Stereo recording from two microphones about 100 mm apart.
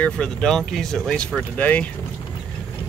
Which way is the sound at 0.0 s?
5° left (ahead or behind).